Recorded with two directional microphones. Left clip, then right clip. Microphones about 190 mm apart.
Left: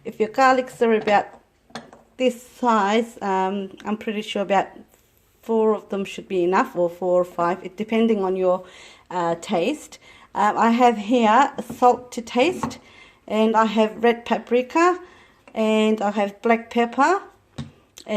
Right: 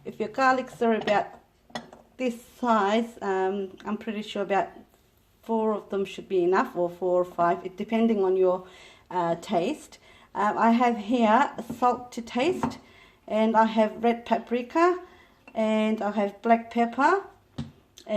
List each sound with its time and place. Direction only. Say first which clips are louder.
0.0 s speech: left 6 dB; 35° left (ahead or behind)